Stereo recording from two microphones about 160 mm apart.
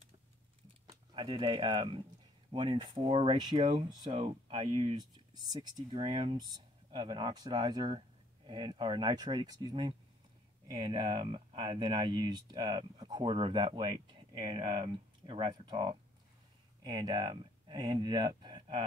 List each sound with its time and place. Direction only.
1.1 s speech: 30° right (ahead or behind)